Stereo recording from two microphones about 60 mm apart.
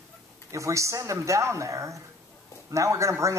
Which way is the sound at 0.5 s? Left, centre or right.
Right.